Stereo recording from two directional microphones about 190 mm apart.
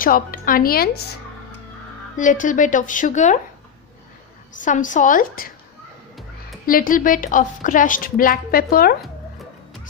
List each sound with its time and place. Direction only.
0.0 s a woman's voice: 45° left (ahead or behind)
2.1 s a woman's voice: 45° left (ahead or behind)
4.6 s a woman's voice: 40° left (ahead or behind)
6.6 s a woman's voice: 50° left (ahead or behind)